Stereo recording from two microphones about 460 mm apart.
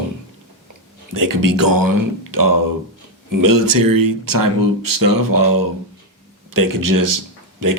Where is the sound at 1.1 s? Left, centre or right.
Right.